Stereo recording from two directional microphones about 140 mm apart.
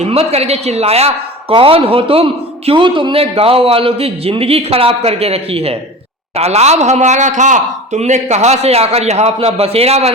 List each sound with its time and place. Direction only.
0.0 s a man's voice: 45° right (ahead or behind)